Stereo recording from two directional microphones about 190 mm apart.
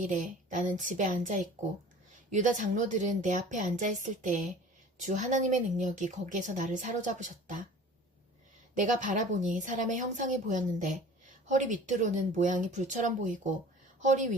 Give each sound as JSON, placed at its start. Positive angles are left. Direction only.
{"t": 0.0, "sound": "a woman's voice", "side_deg": -40}
{"t": 8.7, "sound": "a woman's voice", "side_deg": -40}